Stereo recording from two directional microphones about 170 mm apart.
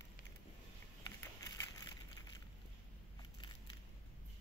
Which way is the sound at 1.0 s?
20° left (ahead or behind).